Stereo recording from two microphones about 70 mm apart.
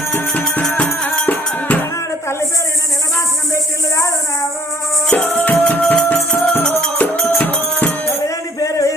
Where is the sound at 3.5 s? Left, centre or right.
Left.